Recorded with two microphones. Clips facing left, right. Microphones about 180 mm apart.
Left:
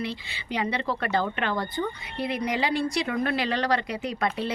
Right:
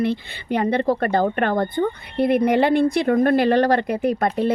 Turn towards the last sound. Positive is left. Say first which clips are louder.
# right 8 dB
turn(degrees=-50)  # may be behind; listen again after turning